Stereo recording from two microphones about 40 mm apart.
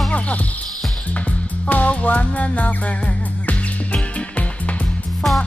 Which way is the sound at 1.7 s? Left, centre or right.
Left.